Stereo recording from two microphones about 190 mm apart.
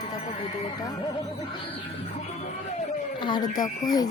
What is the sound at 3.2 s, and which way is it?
Speech, 20° left (ahead or behind).